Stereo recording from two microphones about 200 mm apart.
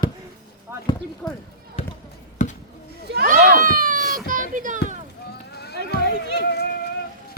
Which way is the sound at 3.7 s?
40° right (ahead or behind).